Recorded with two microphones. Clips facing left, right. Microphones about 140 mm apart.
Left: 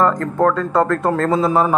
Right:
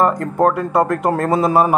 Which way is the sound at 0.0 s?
25° right (ahead or behind).